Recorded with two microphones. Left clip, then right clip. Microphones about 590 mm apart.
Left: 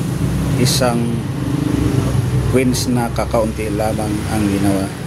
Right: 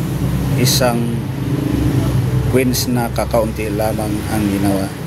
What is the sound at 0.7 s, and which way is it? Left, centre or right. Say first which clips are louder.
Speech: right 2 dB; right.